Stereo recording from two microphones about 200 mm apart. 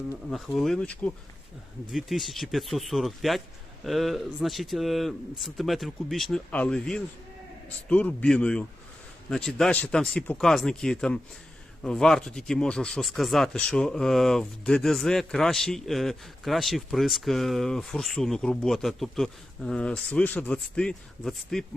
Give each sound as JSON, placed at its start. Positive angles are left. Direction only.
{"t": 0.3, "sound": "speech", "side_deg": 0}